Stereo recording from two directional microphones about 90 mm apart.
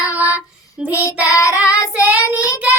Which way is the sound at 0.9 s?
35° left (ahead or behind).